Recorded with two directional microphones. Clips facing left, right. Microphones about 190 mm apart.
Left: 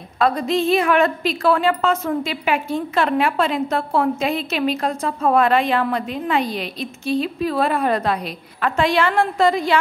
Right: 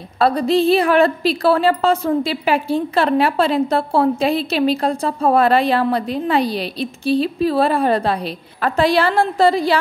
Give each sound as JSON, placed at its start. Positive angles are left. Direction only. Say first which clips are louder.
{"t": 0.2, "sound": "a woman's voice", "louder": "right 4 dB", "side_deg": -35}